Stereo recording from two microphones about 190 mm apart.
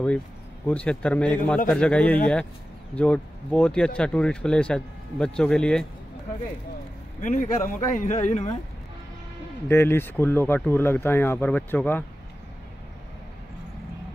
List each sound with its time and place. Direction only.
0.7 s speech: 5° left (ahead or behind)
7.2 s speech: 40° left (ahead or behind)
9.7 s speech: 10° left (ahead or behind)